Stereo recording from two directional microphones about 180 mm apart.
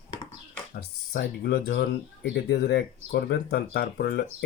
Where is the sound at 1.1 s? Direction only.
60° left (ahead or behind).